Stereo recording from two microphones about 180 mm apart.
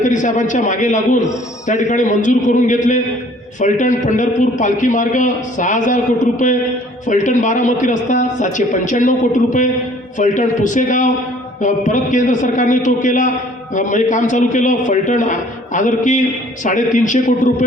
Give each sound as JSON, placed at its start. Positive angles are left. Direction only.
{"t": 0.0, "sound": "a man's voice", "side_deg": 45}